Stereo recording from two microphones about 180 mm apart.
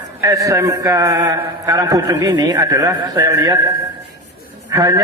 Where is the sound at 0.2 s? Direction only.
20° right (ahead or behind).